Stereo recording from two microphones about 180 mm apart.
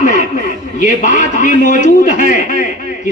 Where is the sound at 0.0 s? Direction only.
45° left (ahead or behind).